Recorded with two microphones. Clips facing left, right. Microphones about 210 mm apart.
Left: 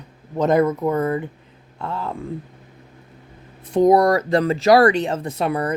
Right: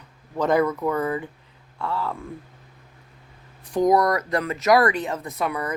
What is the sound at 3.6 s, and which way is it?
Speech, 25° left (ahead or behind).